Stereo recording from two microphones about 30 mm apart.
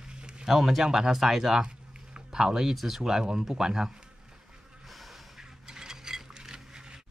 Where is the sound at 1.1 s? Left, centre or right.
Centre.